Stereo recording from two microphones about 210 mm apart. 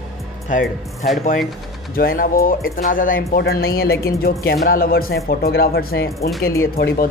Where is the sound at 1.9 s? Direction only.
45° left (ahead or behind).